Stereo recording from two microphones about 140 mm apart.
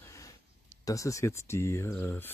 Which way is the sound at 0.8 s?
25° left (ahead or behind).